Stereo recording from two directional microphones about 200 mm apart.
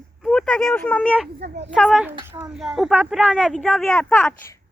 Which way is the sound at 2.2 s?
20° right (ahead or behind).